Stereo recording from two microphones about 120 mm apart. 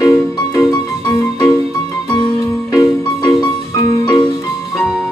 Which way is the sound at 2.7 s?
30° left (ahead or behind).